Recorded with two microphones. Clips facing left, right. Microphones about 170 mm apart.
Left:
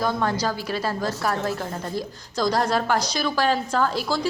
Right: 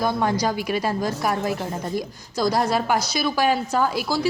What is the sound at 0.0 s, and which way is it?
A woman's voice, 15° right (ahead or behind).